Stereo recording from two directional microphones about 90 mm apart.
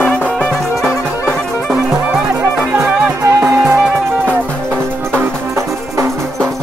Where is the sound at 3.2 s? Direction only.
35° right (ahead or behind).